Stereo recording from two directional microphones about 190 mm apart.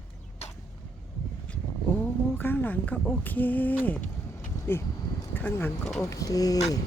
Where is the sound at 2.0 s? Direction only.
10° left (ahead or behind).